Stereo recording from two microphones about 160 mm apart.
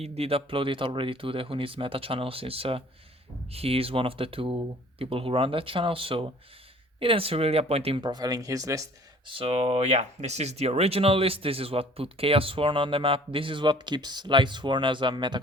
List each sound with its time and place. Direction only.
0.0 s speech: 40° right (ahead or behind); by 8.9 s 20° right (ahead or behind)
9.2 s speech: 35° right (ahead or behind)